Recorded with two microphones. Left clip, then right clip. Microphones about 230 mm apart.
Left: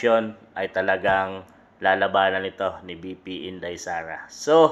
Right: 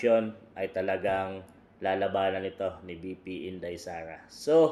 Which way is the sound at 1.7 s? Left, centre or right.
Centre.